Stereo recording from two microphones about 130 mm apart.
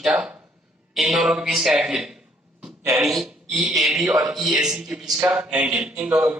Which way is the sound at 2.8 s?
20° right (ahead or behind).